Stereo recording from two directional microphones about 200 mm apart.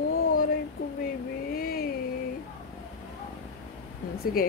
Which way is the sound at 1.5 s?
50° left (ahead or behind).